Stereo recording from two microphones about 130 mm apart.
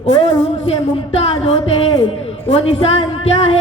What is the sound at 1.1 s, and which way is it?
Speech, 55° left (ahead or behind).